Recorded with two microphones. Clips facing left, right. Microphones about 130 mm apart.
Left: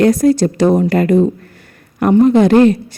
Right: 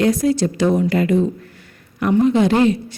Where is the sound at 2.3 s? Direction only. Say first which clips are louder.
Left 6 dB; 50° left (ahead or behind).